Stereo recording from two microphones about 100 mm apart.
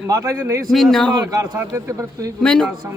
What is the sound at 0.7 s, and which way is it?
Speech, 5° left (ahead or behind).